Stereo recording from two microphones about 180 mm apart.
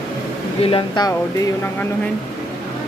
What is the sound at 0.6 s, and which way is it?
Speech, 30° left (ahead or behind).